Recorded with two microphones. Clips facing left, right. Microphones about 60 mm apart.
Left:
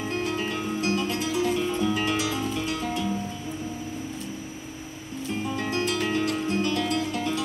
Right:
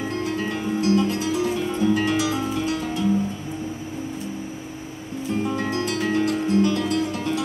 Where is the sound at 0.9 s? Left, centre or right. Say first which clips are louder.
Right 5 dB; right.